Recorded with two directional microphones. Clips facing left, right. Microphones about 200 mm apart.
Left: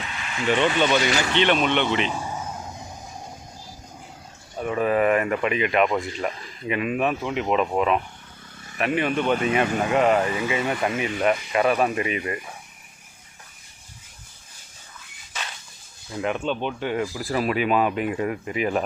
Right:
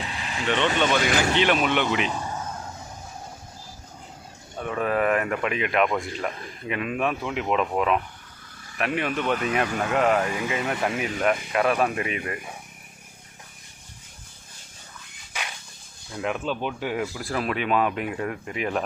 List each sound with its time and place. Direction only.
0.0 s vehicle: 35° right (ahead or behind)
0.4 s speech: 5° left (ahead or behind)
2.1 s a sound: 10° left (ahead or behind)
4.5 s speech: 5° left (ahead or behind)
16.1 s speech: centre (ahead or behind)